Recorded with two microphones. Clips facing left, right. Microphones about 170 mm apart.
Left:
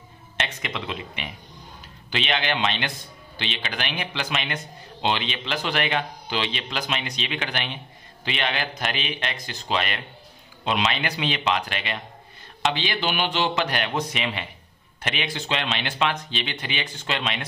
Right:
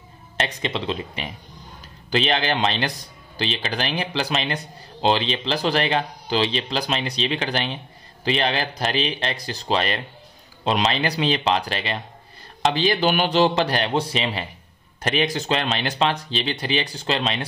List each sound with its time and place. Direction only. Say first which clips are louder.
0.4 s speech: right 5 dB; 35° right (ahead or behind)